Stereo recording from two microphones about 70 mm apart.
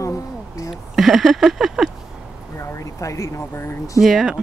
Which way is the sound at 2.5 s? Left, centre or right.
Left.